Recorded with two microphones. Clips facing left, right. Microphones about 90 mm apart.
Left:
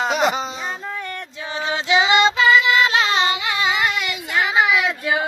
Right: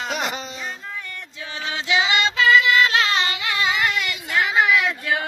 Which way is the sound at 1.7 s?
25° left (ahead or behind).